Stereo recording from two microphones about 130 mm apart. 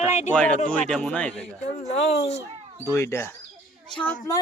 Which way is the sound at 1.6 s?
55° left (ahead or behind).